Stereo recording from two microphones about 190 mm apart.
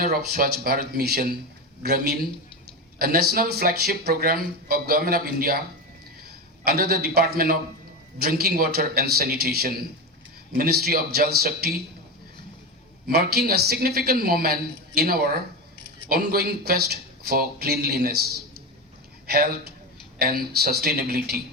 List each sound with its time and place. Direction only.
0.0 s speech: 55° right (ahead or behind)
6.7 s speech: 55° right (ahead or behind)
13.1 s speech: 55° right (ahead or behind)
19.3 s speech: 55° right (ahead or behind)